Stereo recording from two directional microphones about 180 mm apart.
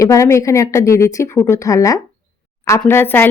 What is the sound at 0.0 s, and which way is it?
Speech, 15° left (ahead or behind).